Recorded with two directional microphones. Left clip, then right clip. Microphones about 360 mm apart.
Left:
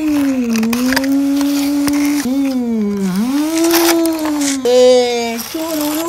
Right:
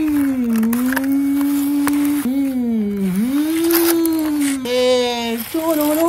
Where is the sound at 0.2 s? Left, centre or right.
Centre.